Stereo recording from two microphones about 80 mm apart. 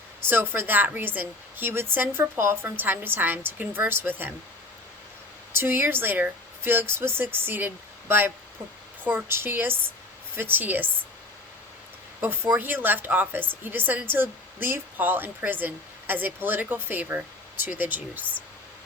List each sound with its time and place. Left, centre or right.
0.3 s a woman's voice: right
5.5 s a woman's voice: right
12.2 s a woman's voice: right